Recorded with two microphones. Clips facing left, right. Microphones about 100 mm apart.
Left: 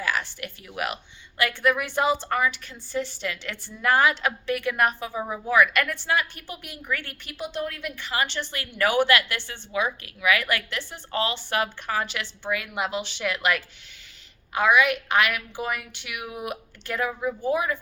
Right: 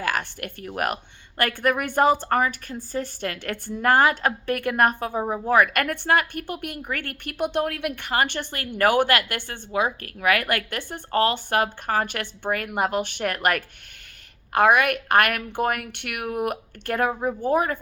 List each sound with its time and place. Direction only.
0.0 s a woman's voice: 50° right (ahead or behind)